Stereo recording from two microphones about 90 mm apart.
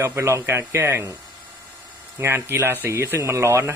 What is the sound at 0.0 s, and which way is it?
Speech, 30° right (ahead or behind).